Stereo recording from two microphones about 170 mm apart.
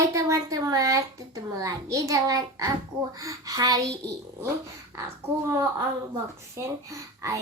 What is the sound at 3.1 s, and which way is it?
Speech, 20° right (ahead or behind).